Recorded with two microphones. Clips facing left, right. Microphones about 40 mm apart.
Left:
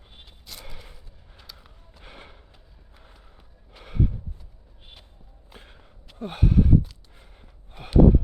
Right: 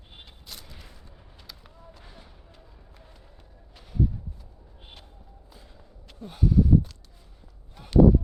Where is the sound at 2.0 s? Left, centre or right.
Left.